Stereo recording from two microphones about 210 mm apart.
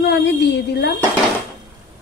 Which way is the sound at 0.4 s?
55° left (ahead or behind).